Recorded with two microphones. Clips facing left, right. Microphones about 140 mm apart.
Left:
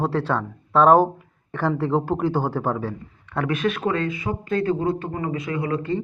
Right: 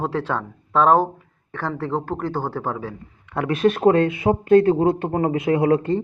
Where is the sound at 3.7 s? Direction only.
50° right (ahead or behind).